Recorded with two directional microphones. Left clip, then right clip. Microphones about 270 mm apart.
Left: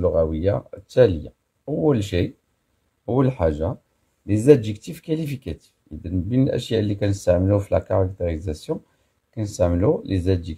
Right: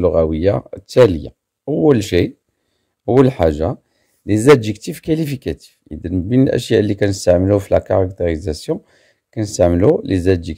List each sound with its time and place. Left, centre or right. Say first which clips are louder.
0.0 s speech: right 6 dB; right